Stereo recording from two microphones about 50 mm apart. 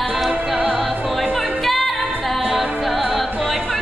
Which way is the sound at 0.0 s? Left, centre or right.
Centre.